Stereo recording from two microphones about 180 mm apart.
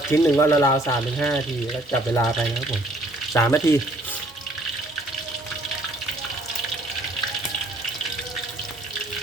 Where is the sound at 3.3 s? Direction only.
15° left (ahead or behind).